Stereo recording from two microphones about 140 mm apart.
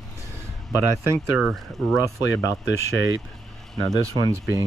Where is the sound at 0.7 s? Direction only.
20° right (ahead or behind).